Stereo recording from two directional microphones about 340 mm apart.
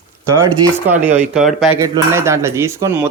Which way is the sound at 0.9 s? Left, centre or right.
Centre.